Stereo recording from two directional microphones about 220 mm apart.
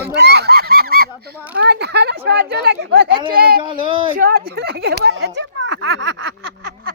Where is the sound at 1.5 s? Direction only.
50° right (ahead or behind).